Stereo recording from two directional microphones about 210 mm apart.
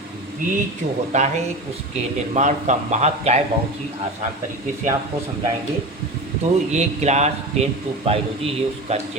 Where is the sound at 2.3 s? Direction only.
35° right (ahead or behind).